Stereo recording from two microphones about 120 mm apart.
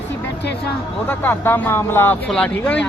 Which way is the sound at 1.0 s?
15° left (ahead or behind).